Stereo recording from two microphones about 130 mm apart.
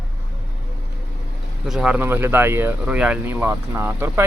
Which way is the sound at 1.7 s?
5° right (ahead or behind).